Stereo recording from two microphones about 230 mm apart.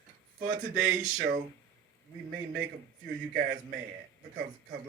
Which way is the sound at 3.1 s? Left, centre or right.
Right.